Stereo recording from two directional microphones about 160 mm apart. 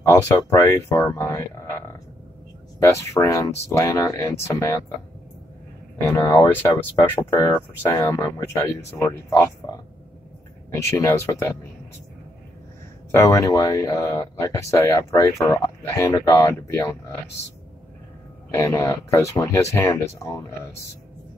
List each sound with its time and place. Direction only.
0.0 s speech: 15° left (ahead or behind)
2.8 s speech: 20° left (ahead or behind)
6.0 s speech: 15° left (ahead or behind)
13.1 s speech: 20° left (ahead or behind)
18.5 s speech: 20° left (ahead or behind)